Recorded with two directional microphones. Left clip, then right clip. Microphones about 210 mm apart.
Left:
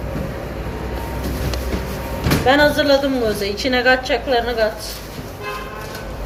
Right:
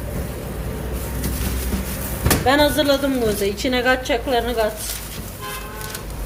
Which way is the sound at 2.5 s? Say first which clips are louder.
Left 3 dB; 65° right (ahead or behind).